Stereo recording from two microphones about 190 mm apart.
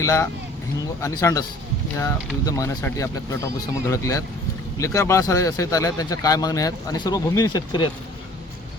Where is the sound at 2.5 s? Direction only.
15° left (ahead or behind).